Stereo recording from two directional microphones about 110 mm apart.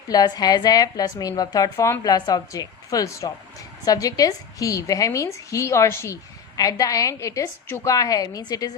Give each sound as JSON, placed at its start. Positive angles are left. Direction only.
{"t": 0.1, "sound": "a woman's voice", "side_deg": 35}